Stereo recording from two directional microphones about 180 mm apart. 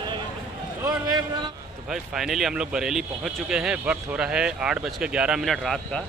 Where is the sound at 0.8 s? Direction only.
20° right (ahead or behind).